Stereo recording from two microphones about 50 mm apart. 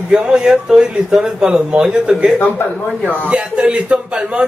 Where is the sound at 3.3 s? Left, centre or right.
Centre.